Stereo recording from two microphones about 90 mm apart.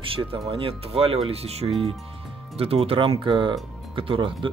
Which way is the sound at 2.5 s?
90° right.